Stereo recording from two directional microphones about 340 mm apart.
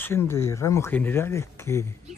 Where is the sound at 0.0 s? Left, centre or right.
Centre.